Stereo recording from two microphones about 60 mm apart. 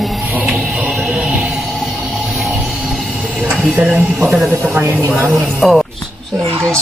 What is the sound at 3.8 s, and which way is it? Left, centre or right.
Speech, right.